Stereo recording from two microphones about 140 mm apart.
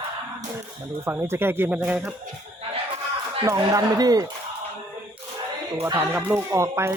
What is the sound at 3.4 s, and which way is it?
Speech, 25° right (ahead or behind).